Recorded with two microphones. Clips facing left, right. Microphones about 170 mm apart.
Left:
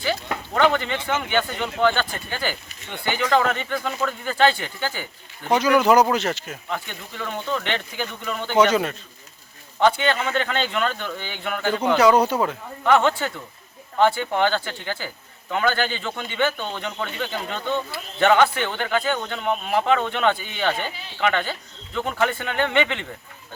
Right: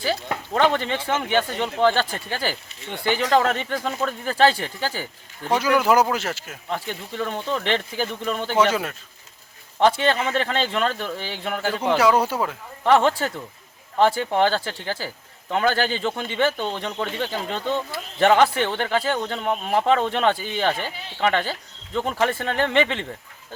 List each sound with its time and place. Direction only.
0.5 s a man's voice: 30° right (ahead or behind)
5.5 s speech: 5° right (ahead or behind)
6.7 s speech: 30° right (ahead or behind)
8.5 s a man's voice: 5° right (ahead or behind)
9.8 s a man's voice: 30° right (ahead or behind)
12.2 s a man's voice: 5° right (ahead or behind)
12.8 s a man's voice: 30° right (ahead or behind)